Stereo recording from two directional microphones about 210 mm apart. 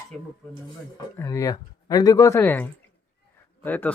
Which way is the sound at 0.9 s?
15° left (ahead or behind).